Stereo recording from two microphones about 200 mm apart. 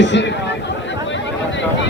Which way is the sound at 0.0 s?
65° left (ahead or behind).